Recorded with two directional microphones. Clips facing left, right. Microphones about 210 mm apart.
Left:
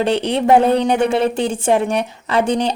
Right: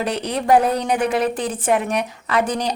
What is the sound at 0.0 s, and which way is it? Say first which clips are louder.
A woman's voice: left 6 dB; 30° left (ahead or behind).